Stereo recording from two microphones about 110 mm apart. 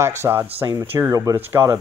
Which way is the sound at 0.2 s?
25° right (ahead or behind).